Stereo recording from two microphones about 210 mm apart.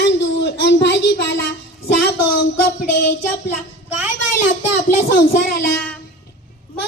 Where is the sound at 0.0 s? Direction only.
55° left (ahead or behind).